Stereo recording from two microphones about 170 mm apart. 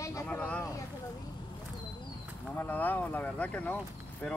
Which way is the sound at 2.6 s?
10° left (ahead or behind).